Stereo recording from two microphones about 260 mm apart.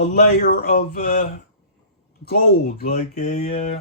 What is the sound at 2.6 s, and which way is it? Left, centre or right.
Speech, left.